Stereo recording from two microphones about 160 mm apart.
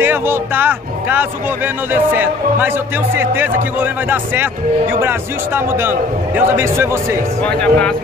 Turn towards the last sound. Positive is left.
turn(degrees=5)  # may be behind; listen again after turning